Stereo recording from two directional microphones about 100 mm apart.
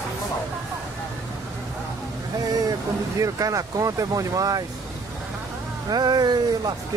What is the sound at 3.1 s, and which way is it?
Speech, 35° right (ahead or behind).